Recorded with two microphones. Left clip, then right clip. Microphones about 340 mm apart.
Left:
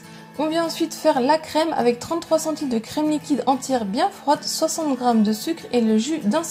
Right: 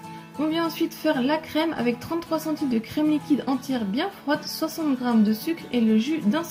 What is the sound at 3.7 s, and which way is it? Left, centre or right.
A woman's voice, centre.